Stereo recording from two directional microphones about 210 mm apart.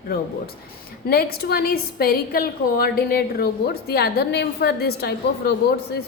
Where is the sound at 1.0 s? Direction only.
50° left (ahead or behind).